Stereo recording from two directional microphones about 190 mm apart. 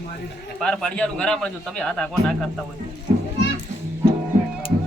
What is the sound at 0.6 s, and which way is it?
Speech, 5° left (ahead or behind).